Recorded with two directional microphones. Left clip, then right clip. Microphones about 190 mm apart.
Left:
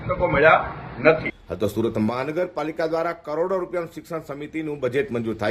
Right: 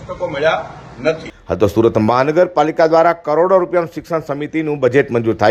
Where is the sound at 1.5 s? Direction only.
35° right (ahead or behind).